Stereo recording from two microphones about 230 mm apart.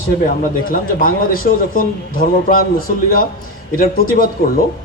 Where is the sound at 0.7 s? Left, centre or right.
Left.